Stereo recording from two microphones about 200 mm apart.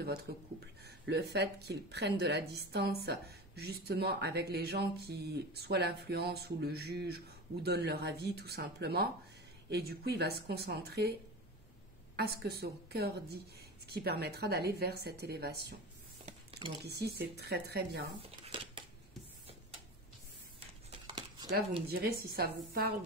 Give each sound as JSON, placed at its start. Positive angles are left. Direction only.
{"t": 0.0, "sound": "speech", "side_deg": -50}
{"t": 12.2, "sound": "speech", "side_deg": -55}
{"t": 16.8, "sound": "speech", "side_deg": -55}
{"t": 18.2, "sound": "a sound", "side_deg": -25}
{"t": 21.8, "sound": "speech", "side_deg": -50}